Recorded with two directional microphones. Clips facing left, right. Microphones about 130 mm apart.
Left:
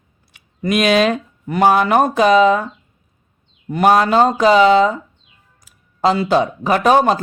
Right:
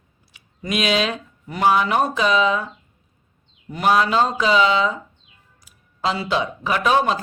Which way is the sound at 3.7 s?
50° left (ahead or behind).